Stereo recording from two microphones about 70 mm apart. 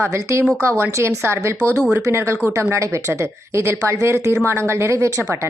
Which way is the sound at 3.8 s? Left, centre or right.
Right.